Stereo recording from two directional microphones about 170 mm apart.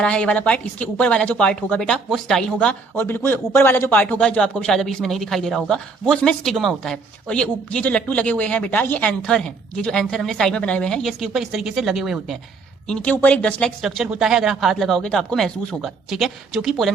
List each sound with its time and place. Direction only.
0.0 s a woman's voice: 5° left (ahead or behind)